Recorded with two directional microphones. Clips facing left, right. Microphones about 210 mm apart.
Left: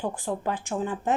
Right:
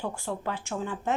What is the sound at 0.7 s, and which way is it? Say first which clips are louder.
Speech: left 4 dB; 30° left (ahead or behind).